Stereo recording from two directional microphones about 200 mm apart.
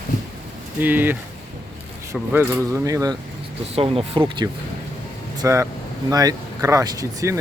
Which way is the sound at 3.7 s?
30° right (ahead or behind).